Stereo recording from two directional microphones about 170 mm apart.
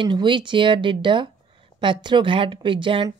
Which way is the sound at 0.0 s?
30° right (ahead or behind).